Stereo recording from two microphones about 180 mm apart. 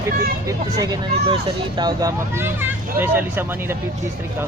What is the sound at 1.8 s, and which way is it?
Speech, 20° right (ahead or behind).